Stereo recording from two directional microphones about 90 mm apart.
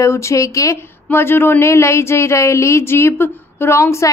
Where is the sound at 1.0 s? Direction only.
25° left (ahead or behind).